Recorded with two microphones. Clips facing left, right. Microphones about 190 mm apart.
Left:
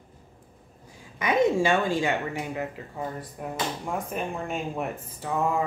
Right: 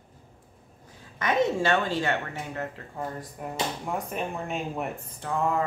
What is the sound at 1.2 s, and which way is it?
Speech, 10° left (ahead or behind).